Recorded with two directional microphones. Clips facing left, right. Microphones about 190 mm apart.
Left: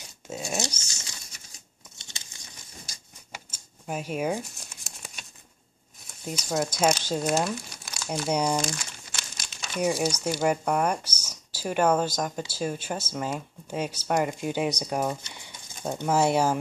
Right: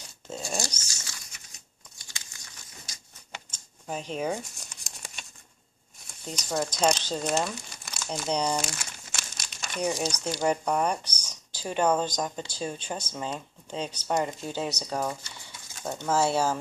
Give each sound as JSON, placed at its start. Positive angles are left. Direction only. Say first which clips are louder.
{"t": 0.3, "sound": "a sound", "louder": "left 2 dB", "side_deg": 5}
{"t": 0.8, "sound": "crumpling", "louder": "left 1 dB", "side_deg": 20}
{"t": 2.0, "sound": "biting", "louder": "left 1 dB", "side_deg": 25}
{"t": 3.3, "sound": "crumpling", "louder": "even", "side_deg": 5}
{"t": 6.0, "sound": "speech", "louder": "left 3 dB", "side_deg": 5}
{"t": 8.5, "sound": "speech", "louder": "left 3 dB", "side_deg": -5}